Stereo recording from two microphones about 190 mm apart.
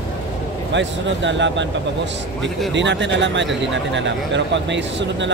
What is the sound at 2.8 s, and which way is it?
Speech, 70° right (ahead or behind).